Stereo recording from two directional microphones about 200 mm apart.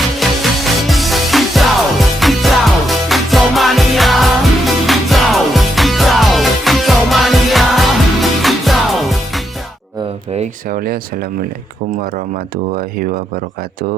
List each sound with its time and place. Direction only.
0.2 s music: centre (ahead or behind)
10.3 s speech: 40° right (ahead or behind)
12.7 s speech: 45° right (ahead or behind)